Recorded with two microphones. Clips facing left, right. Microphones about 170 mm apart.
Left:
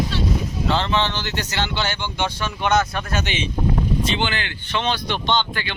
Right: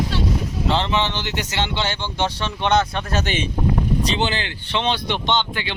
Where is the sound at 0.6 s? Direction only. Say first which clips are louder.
Even; 20° right (ahead or behind).